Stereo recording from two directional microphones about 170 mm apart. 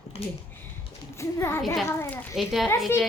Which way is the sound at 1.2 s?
15° left (ahead or behind).